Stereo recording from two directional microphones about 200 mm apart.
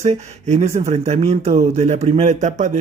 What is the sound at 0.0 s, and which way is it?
Speech, 35° right (ahead or behind).